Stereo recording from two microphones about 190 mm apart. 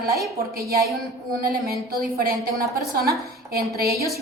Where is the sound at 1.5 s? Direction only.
50° right (ahead or behind).